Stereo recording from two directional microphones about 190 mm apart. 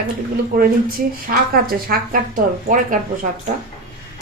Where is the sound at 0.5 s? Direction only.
50° right (ahead or behind).